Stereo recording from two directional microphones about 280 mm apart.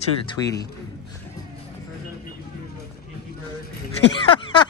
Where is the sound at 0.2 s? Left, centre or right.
Centre.